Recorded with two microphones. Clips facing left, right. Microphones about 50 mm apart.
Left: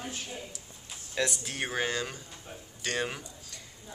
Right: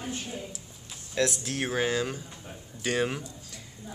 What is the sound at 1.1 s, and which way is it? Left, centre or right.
Speech, centre.